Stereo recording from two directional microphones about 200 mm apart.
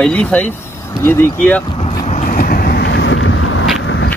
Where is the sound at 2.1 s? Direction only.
45° left (ahead or behind); by 3.6 s 75° left (ahead or behind).